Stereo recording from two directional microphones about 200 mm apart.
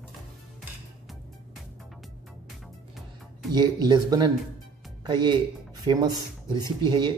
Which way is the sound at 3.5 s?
20° right (ahead or behind).